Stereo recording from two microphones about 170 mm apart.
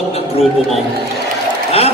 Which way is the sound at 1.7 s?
35° left (ahead or behind).